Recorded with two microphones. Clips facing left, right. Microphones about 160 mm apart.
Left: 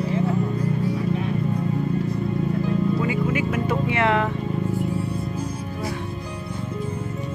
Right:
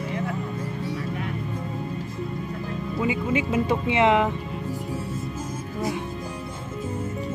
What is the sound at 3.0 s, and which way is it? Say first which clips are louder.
Speech: left 1 dB; 20° right (ahead or behind).